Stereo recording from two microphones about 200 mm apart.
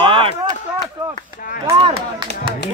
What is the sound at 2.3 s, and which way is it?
Speech, 55° left (ahead or behind).